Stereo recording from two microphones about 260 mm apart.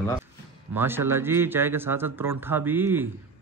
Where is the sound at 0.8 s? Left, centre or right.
Centre.